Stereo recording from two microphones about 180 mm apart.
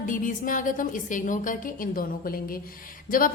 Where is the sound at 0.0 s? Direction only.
45° left (ahead or behind).